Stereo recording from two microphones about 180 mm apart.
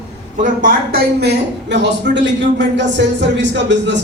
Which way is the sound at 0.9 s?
65° right (ahead or behind).